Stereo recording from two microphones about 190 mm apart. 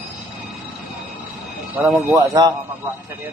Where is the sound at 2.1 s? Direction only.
20° right (ahead or behind).